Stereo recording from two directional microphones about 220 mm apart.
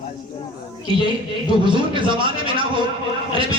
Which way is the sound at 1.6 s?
20° right (ahead or behind).